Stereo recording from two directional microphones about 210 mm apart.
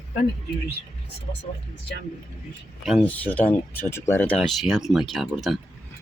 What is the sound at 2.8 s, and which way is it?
Speech, centre (ahead or behind).